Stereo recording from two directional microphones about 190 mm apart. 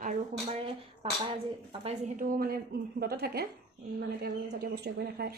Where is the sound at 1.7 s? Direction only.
40° right (ahead or behind).